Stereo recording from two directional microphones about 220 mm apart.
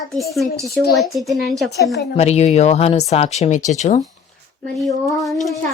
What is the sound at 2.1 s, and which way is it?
Speech, 30° left (ahead or behind).